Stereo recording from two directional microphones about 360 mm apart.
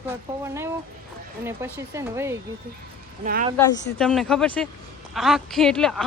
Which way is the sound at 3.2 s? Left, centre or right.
Right.